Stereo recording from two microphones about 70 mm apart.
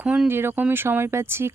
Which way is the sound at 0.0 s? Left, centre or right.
Centre.